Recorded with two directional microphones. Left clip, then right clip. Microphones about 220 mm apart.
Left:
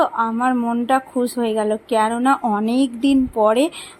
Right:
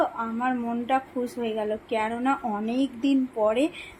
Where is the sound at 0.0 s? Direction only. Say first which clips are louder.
Left 8 dB; 45° left (ahead or behind).